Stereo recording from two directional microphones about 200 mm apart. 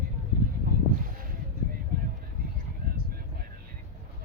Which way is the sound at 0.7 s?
45° right (ahead or behind).